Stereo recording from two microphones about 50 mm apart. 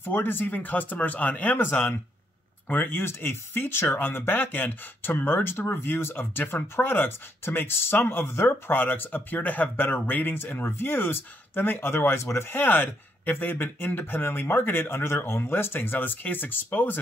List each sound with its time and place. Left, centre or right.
0.0 s speech: left
3.0 s speech: left